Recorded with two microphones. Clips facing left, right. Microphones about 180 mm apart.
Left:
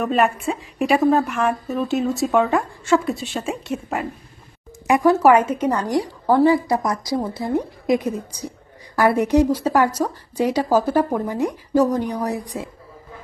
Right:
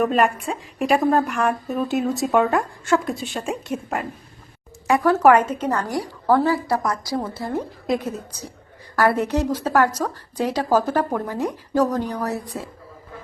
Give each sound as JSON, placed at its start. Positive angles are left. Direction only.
{"t": 0.0, "sound": "a woman's voice", "side_deg": 0}
{"t": 4.9, "sound": "speech", "side_deg": 15}